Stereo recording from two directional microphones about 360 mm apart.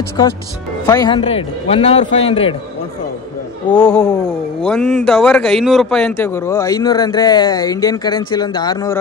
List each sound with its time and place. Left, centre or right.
0.2 s a man's voice: centre
3.7 s a man's voice: centre